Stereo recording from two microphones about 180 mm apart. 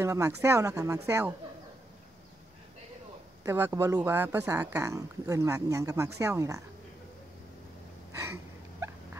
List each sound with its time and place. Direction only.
0.0 s speech: 15° right (ahead or behind)
3.4 s speech: 15° right (ahead or behind)
8.7 s fowl: 15° right (ahead or behind)